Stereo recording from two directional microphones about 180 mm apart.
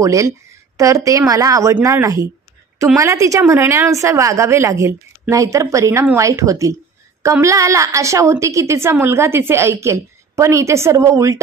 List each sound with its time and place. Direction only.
0.0 s a woman's voice: 15° right (ahead or behind)